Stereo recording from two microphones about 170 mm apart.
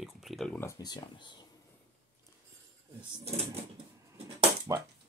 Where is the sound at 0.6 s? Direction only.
20° left (ahead or behind).